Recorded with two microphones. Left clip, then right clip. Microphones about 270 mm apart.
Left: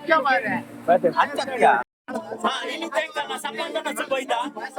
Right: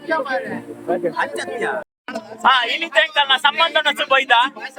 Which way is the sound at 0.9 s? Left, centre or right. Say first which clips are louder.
Left 2 dB; centre.